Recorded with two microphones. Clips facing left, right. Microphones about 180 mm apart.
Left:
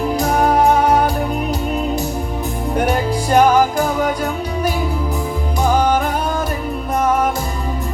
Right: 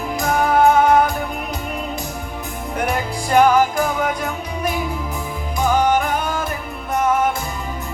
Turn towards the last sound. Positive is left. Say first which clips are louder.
# left 1 dB
turn(degrees=35)  # may be behind; listen again after turning